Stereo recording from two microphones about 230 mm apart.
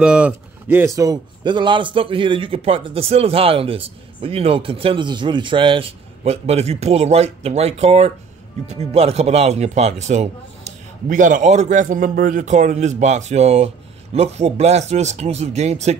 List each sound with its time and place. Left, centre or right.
0.0 s a man's voice: centre; by 16.0 s right